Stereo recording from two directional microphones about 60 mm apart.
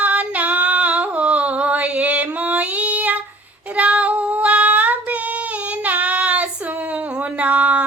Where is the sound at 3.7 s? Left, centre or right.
Right.